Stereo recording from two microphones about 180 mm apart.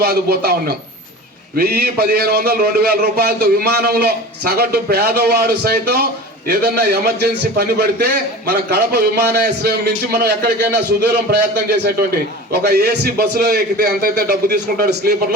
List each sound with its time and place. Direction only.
0.0 s a man's voice: 60° right (ahead or behind)